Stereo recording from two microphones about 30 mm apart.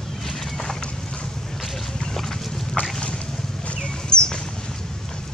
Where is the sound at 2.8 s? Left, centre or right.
Left.